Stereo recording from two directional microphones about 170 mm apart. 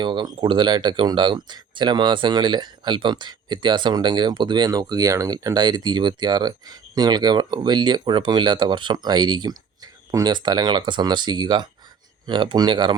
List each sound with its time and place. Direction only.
0.0 s speech: 25° right (ahead or behind)